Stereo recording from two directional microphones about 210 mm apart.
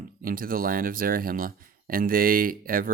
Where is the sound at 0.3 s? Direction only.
45° right (ahead or behind).